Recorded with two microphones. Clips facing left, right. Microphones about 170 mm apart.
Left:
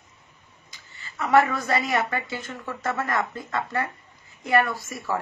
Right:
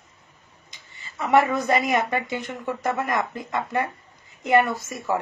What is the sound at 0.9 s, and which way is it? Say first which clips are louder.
A woman's voice: even; 20° right (ahead or behind).